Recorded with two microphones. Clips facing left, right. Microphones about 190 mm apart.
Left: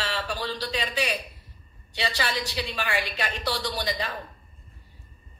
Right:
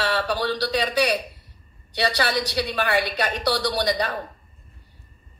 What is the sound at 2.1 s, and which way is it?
Speech, 65° right (ahead or behind).